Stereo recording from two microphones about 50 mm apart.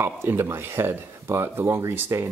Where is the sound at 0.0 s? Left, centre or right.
Right.